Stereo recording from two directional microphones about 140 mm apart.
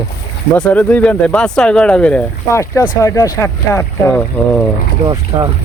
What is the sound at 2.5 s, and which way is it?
Speech, 20° left (ahead or behind).